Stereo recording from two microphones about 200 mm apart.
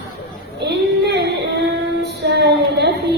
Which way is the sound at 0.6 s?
60° right (ahead or behind).